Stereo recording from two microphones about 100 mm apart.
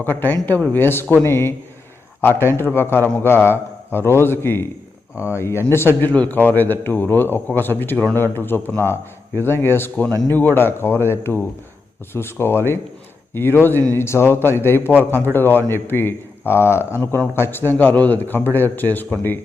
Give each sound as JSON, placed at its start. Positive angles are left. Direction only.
{"t": 0.0, "sound": "a man's voice", "side_deg": 20}